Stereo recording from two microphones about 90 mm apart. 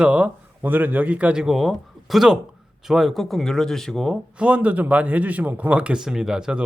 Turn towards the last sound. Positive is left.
turn(degrees=-10)  # may be behind; listen again after turning